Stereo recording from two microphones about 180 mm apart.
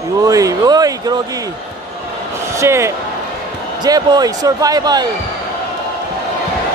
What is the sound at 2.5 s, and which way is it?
Speech, 15° right (ahead or behind).